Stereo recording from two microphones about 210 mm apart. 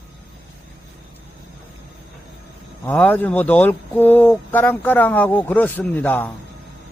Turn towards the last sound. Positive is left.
turn(degrees=10)  # may be behind; listen again after turning